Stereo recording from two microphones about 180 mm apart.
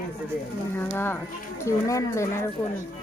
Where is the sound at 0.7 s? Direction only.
10° left (ahead or behind).